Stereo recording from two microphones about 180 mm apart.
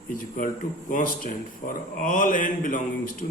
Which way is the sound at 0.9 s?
50° left (ahead or behind).